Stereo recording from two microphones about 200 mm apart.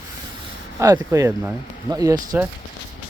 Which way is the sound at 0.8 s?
15° right (ahead or behind).